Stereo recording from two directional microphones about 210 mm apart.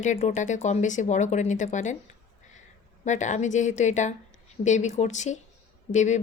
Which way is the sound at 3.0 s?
35° left (ahead or behind).